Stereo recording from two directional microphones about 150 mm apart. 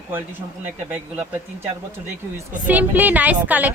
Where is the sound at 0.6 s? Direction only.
10° right (ahead or behind).